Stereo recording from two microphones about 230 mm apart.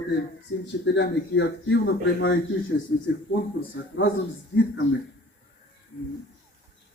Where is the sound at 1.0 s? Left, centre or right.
Left.